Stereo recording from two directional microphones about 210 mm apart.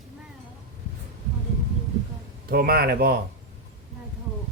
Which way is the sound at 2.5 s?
45° right (ahead or behind).